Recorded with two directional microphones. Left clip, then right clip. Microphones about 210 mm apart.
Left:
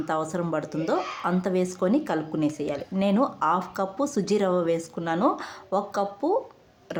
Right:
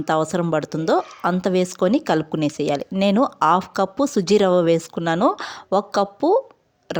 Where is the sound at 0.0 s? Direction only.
40° right (ahead or behind).